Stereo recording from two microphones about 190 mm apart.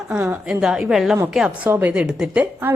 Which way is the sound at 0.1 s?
5° right (ahead or behind).